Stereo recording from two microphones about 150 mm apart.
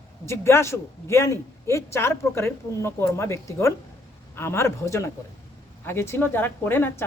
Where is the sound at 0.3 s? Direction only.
20° left (ahead or behind).